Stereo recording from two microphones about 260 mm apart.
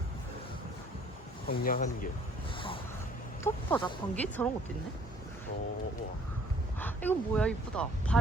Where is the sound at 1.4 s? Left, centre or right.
Left.